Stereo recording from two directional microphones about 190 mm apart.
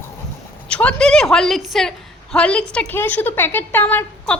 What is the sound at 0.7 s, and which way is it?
A woman's voice, 5° left (ahead or behind).